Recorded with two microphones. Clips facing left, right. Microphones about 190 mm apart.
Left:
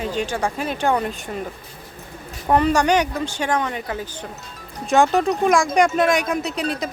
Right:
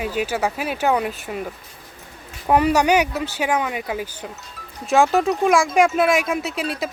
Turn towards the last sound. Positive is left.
turn(degrees=0)  # may be behind; listen again after turning